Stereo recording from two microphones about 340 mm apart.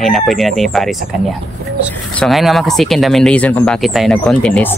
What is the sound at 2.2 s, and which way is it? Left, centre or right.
Speech, centre.